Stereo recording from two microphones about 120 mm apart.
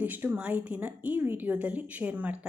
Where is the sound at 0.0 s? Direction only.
15° right (ahead or behind).